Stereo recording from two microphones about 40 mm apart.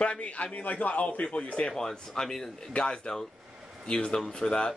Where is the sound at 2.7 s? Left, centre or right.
Left.